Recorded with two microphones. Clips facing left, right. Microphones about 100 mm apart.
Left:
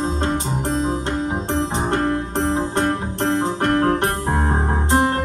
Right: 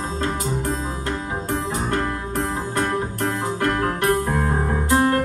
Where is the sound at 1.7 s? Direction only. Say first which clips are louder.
Left 4 dB; 25° left (ahead or behind).